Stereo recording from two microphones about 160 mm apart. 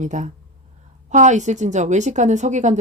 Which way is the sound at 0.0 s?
50° right (ahead or behind).